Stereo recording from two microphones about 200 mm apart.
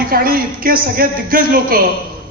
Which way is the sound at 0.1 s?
45° right (ahead or behind).